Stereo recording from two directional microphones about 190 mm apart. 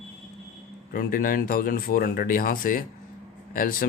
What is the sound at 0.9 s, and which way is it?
Speech, 50° left (ahead or behind).